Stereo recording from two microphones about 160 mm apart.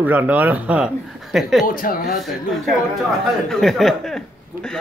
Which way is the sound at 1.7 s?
65° left (ahead or behind).